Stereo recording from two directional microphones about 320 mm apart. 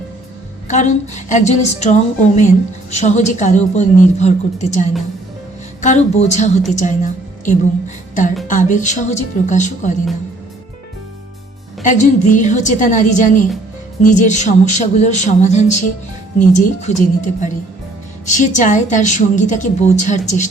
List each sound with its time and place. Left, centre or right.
0.7 s a woman's voice: left
11.8 s a woman's voice: left